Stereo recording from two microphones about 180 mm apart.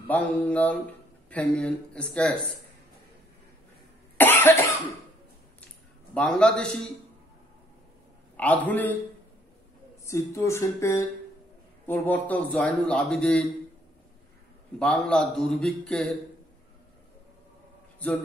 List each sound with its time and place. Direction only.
0.0 s a man's voice: 10° left (ahead or behind)
4.2 s cough: 10° left (ahead or behind)
6.1 s a man's voice: 5° left (ahead or behind)
8.4 s speech: 10° left (ahead or behind)
10.0 s a man's voice: 15° left (ahead or behind)
14.8 s a man's voice: 5° left (ahead or behind)
17.9 s a man's voice: 10° left (ahead or behind)